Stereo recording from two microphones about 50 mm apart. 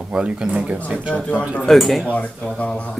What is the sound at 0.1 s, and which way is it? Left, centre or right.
Speech, right.